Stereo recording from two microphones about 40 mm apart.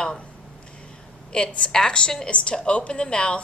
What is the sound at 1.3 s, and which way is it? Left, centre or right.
A woman's voice, centre.